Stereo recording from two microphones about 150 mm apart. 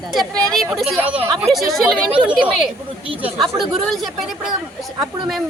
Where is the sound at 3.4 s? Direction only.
Centre (ahead or behind).